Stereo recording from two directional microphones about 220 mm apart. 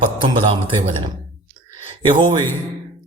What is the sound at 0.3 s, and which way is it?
Speech, 20° right (ahead or behind).